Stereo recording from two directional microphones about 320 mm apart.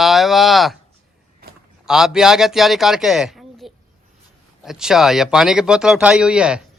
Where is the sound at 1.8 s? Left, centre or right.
Centre.